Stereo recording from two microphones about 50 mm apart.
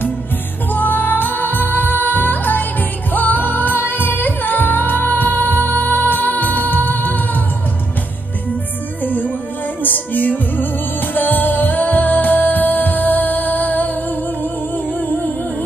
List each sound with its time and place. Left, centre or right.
0.7 s music: left
9.0 s music: left